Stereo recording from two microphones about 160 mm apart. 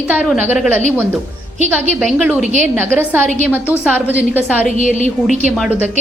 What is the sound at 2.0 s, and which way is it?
A woman's voice, 5° right (ahead or behind).